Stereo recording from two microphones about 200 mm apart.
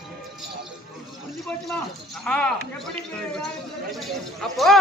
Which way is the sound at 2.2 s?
5° left (ahead or behind).